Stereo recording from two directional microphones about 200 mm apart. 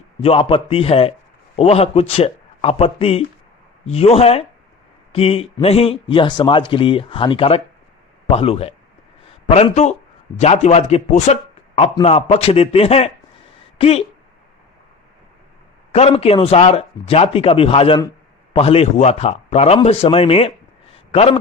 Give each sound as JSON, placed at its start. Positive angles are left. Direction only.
{"t": 0.2, "sound": "speech", "side_deg": 30}
{"t": 15.9, "sound": "speech", "side_deg": 30}